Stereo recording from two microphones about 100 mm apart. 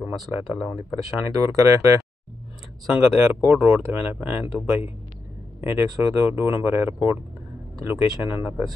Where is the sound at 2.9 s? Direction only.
15° right (ahead or behind).